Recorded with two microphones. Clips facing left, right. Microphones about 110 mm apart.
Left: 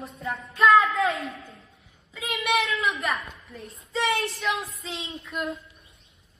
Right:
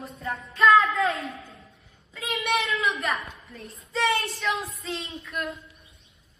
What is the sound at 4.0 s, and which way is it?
Speech, centre (ahead or behind).